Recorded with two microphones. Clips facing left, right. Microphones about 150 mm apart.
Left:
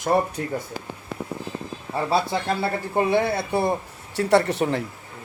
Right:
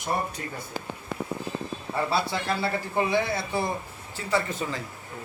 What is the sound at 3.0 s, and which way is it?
Speech, 35° left (ahead or behind).